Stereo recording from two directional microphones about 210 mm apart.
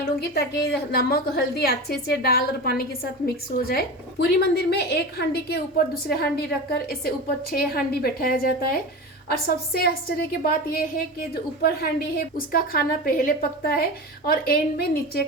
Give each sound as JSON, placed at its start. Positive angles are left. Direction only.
{"t": 0.2, "sound": "a woman's voice", "side_deg": 50}